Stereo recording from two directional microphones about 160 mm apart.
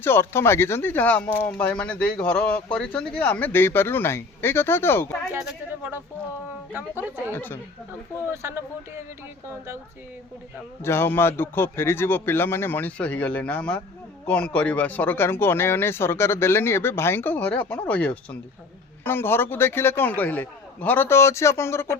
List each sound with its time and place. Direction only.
0.0 s speech: 15° left (ahead or behind)
5.3 s speech: 10° right (ahead or behind)
7.3 s speech: 15° left (ahead or behind)
8.3 s speech: 15° right (ahead or behind)
10.8 s speech: 15° left (ahead or behind)